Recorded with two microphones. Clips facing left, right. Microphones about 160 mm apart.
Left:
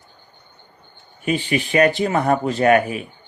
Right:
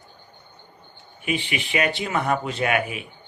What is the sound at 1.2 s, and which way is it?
Speech, 40° left (ahead or behind).